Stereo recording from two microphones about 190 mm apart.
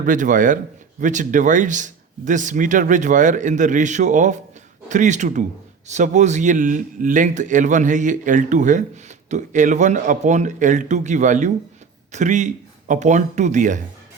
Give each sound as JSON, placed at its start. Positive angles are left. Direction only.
{"t": 0.0, "sound": "speech", "side_deg": -40}